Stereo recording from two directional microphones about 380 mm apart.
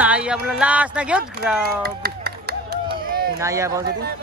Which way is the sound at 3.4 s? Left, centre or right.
Centre.